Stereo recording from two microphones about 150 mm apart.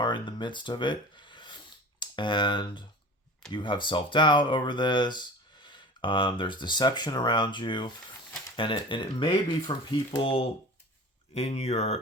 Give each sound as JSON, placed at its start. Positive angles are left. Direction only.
{"t": 0.0, "sound": "speech", "side_deg": 30}